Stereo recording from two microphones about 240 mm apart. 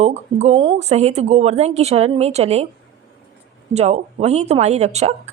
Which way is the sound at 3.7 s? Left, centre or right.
Right.